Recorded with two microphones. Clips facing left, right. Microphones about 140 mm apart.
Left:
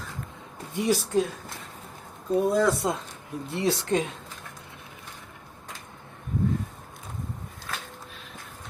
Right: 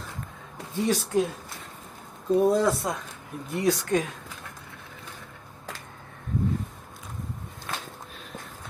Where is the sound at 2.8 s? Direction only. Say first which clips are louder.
Left 3 dB; 20° left (ahead or behind).